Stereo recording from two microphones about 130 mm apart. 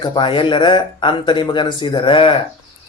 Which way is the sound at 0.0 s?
40° left (ahead or behind).